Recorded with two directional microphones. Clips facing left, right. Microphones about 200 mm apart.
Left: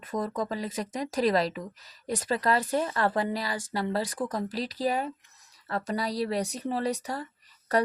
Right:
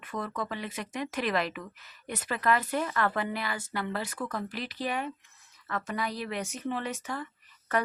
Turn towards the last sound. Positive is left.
turn(degrees=35)  # may be behind; listen again after turning